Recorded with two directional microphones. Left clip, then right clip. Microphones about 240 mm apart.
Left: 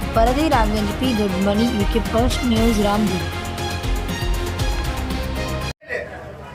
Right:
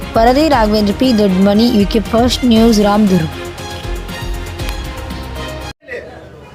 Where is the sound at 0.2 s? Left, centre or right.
Right.